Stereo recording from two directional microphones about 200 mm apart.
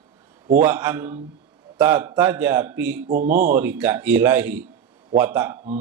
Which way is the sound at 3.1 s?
45° right (ahead or behind).